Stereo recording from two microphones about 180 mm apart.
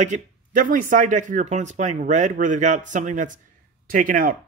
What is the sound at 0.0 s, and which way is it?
Speech, 45° right (ahead or behind).